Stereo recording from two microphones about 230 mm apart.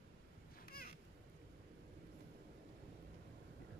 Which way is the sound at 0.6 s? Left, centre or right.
Left.